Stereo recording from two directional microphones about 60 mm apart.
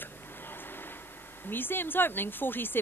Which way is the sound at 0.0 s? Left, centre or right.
Left.